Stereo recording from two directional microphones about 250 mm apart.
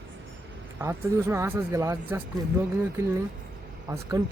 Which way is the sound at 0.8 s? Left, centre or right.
Centre.